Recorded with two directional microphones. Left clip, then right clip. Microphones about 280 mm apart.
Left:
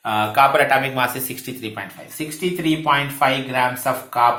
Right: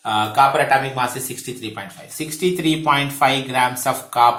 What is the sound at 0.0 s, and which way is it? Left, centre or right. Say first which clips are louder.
Speech: even; centre.